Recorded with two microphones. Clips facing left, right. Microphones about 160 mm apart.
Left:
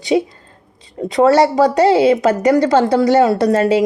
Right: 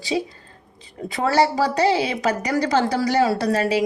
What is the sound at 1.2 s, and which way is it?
A woman's voice, 25° left (ahead or behind).